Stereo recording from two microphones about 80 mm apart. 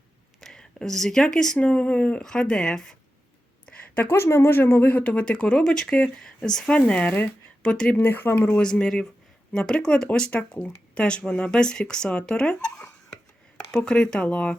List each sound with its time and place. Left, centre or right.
0.4 s speech: centre
3.7 s a sound: centre
4.1 s speech: left; by 7.9 s centre
7.9 s speech: left
8.5 s speech: centre